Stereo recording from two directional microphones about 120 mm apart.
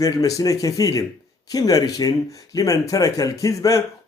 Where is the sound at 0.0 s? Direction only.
30° left (ahead or behind).